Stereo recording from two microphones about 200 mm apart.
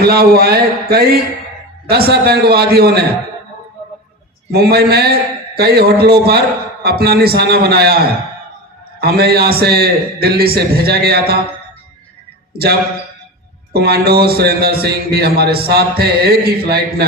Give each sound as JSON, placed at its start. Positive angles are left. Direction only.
{"t": 0.0, "sound": "a man's voice", "side_deg": -50}
{"t": 4.5, "sound": "a man's voice", "side_deg": -50}
{"t": 12.5, "sound": "a man's voice", "side_deg": -50}
{"t": 13.7, "sound": "a man's voice", "side_deg": -50}